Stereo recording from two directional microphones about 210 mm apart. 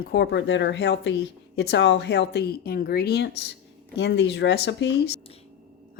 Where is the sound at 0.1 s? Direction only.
50° left (ahead or behind).